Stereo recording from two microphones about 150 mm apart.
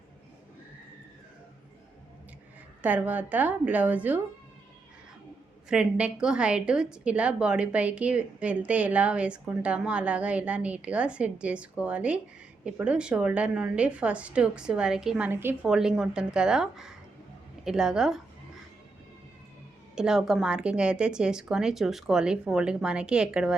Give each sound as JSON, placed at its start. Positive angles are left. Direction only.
{"t": 2.8, "sound": "a woman's voice", "side_deg": -10}
{"t": 5.6, "sound": "a woman's voice", "side_deg": -5}
{"t": 15.3, "sound": "a woman's voice", "side_deg": -15}
{"t": 15.6, "sound": "speech", "side_deg": -5}
{"t": 20.0, "sound": "speech", "side_deg": -5}